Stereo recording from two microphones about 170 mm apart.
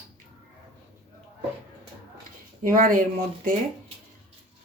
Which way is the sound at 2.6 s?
55° right (ahead or behind).